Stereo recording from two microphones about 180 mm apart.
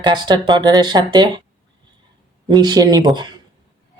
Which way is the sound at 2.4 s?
20° right (ahead or behind).